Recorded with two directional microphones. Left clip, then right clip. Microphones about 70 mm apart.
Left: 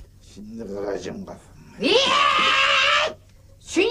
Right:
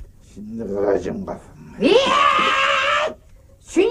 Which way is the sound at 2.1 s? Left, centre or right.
Left.